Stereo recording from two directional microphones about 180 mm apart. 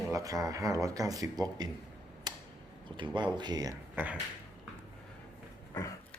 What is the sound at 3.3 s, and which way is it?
Speech, 25° right (ahead or behind).